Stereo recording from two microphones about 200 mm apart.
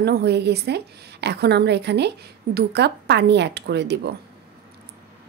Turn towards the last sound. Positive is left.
turn(degrees=-60)  # may be behind; listen again after turning